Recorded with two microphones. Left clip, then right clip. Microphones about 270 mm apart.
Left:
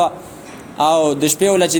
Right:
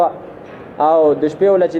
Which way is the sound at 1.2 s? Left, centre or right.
Left.